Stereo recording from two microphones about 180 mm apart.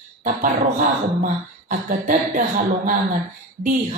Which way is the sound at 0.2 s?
50° right (ahead or behind).